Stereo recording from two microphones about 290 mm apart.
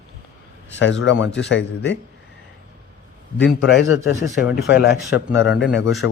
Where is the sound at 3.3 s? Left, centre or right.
Left.